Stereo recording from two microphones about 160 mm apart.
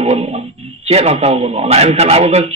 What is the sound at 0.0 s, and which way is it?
Speech, 40° right (ahead or behind).